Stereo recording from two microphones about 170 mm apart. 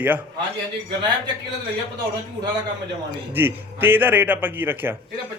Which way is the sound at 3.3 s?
10° right (ahead or behind).